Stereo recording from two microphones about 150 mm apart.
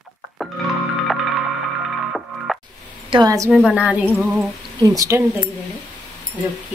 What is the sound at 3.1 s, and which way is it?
Speech, 25° right (ahead or behind).